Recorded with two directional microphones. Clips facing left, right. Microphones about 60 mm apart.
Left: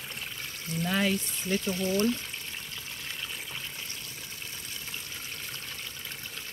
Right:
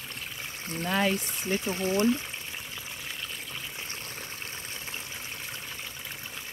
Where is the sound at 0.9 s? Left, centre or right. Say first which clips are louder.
Right 2 dB; centre.